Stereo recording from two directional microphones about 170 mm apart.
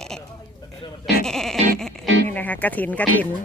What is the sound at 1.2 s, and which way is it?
Sheep, 5° left (ahead or behind).